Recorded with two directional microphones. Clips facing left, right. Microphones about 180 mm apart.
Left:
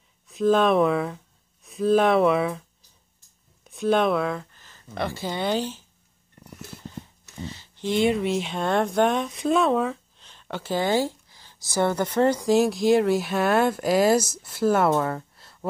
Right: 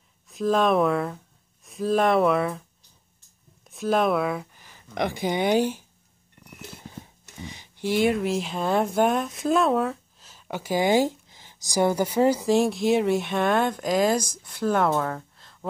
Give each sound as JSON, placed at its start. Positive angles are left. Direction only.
{"t": 0.3, "sound": "speech", "side_deg": 0}
{"t": 3.6, "sound": "speech", "side_deg": 0}
{"t": 7.4, "sound": "speech", "side_deg": -15}